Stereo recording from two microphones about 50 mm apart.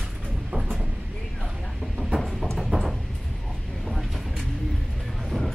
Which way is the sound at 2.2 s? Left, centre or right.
Centre.